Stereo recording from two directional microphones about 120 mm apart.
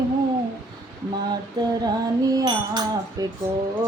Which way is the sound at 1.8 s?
30° right (ahead or behind).